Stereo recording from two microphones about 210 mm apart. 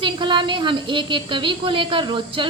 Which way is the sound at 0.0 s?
20° right (ahead or behind).